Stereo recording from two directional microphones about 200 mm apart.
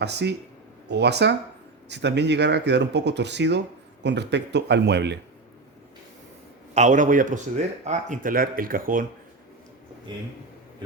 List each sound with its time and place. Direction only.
0.0 s speech: 55° right (ahead or behind)
6.7 s speech: 40° right (ahead or behind)